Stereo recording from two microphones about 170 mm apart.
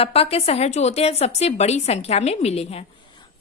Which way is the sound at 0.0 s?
35° left (ahead or behind).